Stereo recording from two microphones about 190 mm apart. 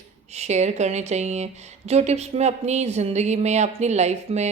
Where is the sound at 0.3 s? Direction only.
35° right (ahead or behind).